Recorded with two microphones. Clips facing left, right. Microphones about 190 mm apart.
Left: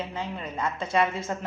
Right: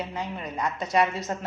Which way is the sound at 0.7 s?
25° left (ahead or behind).